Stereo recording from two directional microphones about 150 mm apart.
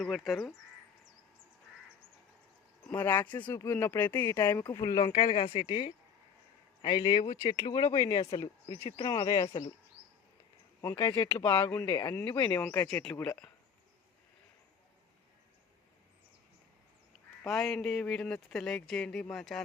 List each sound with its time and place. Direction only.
0.0 s speech: centre (ahead or behind)
2.8 s speech: 10° left (ahead or behind); by 9.6 s 30° left (ahead or behind)
10.8 s speech: 25° left (ahead or behind)
12.1 s speech: 15° left (ahead or behind)
17.4 s speech: centre (ahead or behind)